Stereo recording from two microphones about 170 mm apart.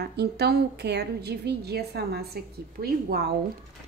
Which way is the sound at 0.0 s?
75° right (ahead or behind).